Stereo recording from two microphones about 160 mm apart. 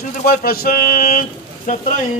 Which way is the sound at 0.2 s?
65° left (ahead or behind).